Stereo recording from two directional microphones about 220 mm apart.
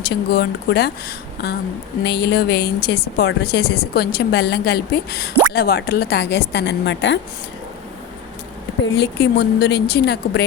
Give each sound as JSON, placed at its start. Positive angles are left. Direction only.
{"t": 0.3, "sound": "a woman's voice", "side_deg": 45}
{"t": 8.8, "sound": "a woman's voice", "side_deg": 50}